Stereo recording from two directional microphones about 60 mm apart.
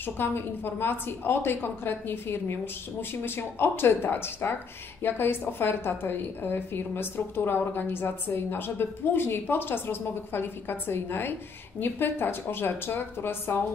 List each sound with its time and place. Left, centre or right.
0.0 s a woman's voice: left